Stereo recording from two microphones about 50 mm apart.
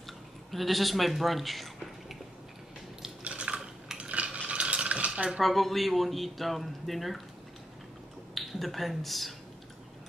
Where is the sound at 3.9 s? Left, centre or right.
Right.